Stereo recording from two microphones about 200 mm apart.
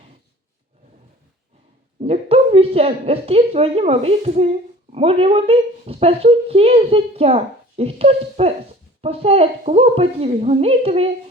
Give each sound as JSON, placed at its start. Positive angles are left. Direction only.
{"t": 2.0, "sound": "a woman's voice", "side_deg": -30}